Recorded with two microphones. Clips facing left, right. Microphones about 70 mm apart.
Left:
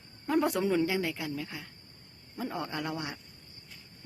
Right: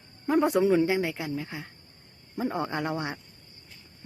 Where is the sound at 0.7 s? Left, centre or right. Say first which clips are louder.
Right 5 dB; right.